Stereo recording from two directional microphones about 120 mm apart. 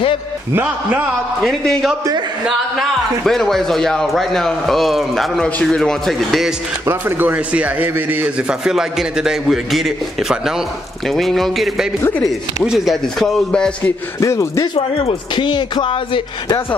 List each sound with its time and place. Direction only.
0.6 s a man's voice: 15° right (ahead or behind)
1.4 s a man's voice: 5° left (ahead or behind)
6.9 s a man's voice: 20° right (ahead or behind); by 9.9 s centre (ahead or behind)
11.1 s a man's voice: centre (ahead or behind)
14.2 s speech: 25° left (ahead or behind)
14.8 s speech: 55° left (ahead or behind)
15.3 s speech: 40° left (ahead or behind)